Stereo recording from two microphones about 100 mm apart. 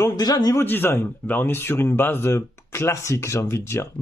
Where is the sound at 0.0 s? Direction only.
40° left (ahead or behind).